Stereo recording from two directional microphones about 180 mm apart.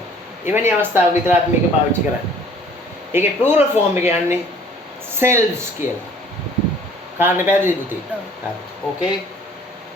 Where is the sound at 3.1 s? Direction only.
10° right (ahead or behind).